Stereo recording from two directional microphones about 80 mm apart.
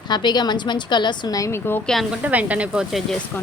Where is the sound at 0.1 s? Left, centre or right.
Left.